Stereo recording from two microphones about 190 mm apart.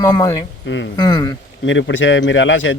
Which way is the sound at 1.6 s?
75° left (ahead or behind).